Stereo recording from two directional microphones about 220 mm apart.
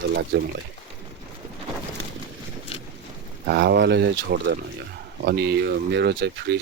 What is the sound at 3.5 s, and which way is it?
Speech, 50° right (ahead or behind).